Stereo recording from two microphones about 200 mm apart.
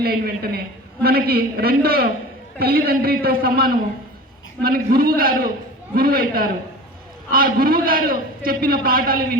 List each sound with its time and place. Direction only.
0.0 s a man's voice: 50° right (ahead or behind)